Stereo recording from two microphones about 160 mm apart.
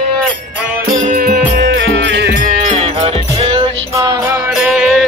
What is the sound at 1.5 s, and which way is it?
Music, 90° right.